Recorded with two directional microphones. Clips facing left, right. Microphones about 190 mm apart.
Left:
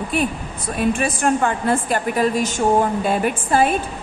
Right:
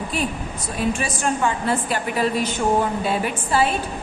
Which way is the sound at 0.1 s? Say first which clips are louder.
Left 5 dB; 55° left (ahead or behind).